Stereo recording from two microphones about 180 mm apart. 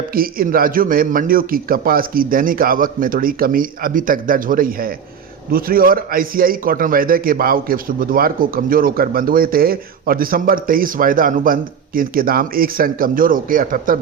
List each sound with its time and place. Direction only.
0.1 s a man's voice: 55° right (ahead or behind)